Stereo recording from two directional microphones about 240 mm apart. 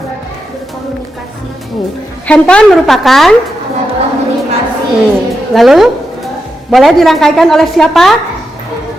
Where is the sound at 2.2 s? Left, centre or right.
Centre.